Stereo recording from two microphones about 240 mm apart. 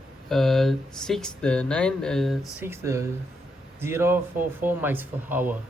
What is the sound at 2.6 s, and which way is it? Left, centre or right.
Speech, centre.